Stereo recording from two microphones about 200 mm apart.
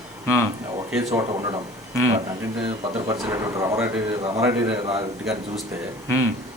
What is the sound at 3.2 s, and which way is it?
Speech, 15° right (ahead or behind).